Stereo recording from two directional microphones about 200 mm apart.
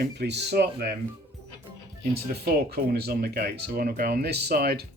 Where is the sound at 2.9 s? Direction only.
50° right (ahead or behind).